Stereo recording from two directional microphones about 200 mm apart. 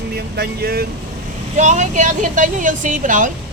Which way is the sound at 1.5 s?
35° right (ahead or behind).